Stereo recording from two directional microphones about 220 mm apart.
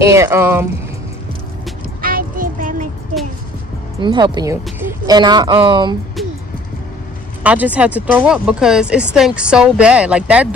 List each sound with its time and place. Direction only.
0.0 s speech: 15° right (ahead or behind)
2.0 s child singing: 40° right (ahead or behind)
4.0 s speech: 20° right (ahead or behind)
7.4 s speech: 5° right (ahead or behind)